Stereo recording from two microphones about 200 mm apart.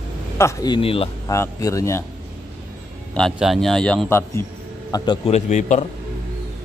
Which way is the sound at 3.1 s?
Centre (ahead or behind).